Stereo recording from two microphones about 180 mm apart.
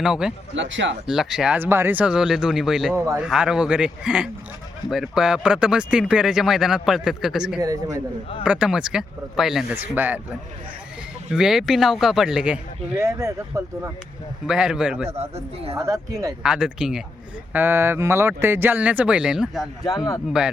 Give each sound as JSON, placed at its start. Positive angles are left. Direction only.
{"t": 0.0, "sound": "speech", "side_deg": -5}
{"t": 0.5, "sound": "speech", "side_deg": -90}
{"t": 1.0, "sound": "speech", "side_deg": 0}
{"t": 2.9, "sound": "speech", "side_deg": -15}
{"t": 3.2, "sound": "speech", "side_deg": -5}
{"t": 7.6, "sound": "speech", "side_deg": -20}
{"t": 8.4, "sound": "speech", "side_deg": -5}
{"t": 11.3, "sound": "speech", "side_deg": -5}
{"t": 14.4, "sound": "speech", "side_deg": -5}
{"t": 15.0, "sound": "speech", "side_deg": -35}
{"t": 15.7, "sound": "speech", "side_deg": -20}
{"t": 16.4, "sound": "speech", "side_deg": -5}